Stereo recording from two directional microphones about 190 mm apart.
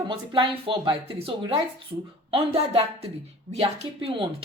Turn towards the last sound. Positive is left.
turn(degrees=-30)  # may be behind; listen again after turning